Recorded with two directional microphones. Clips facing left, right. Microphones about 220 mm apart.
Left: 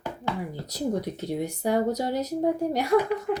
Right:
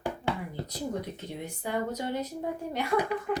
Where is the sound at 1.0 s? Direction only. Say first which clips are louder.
Left 8 dB; 35° left (ahead or behind).